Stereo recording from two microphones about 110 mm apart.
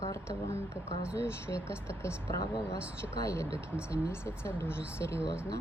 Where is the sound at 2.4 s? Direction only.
35° left (ahead or behind).